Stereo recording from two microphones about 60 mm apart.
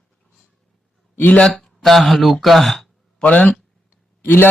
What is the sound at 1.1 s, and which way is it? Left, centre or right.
Speech, left.